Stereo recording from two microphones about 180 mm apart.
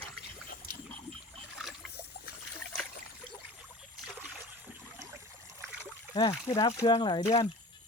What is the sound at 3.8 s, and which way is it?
Rowboat, centre (ahead or behind).